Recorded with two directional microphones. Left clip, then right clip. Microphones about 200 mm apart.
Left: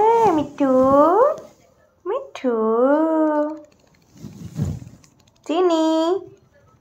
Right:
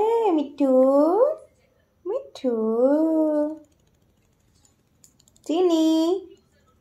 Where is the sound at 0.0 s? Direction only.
25° left (ahead or behind).